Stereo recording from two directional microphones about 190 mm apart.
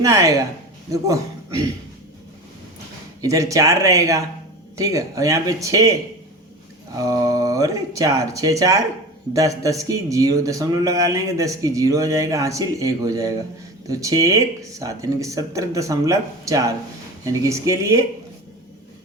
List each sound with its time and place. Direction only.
0.0 s a man's voice: 15° right (ahead or behind)
3.2 s a man's voice: 15° right (ahead or behind)
6.9 s a man's voice: 20° right (ahead or behind)